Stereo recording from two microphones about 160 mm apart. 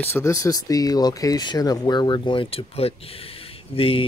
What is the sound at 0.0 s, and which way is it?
Speech, 15° left (ahead or behind).